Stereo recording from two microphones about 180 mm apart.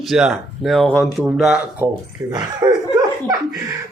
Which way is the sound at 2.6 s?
20° right (ahead or behind).